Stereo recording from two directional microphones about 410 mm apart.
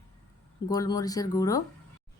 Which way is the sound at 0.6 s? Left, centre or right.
Centre.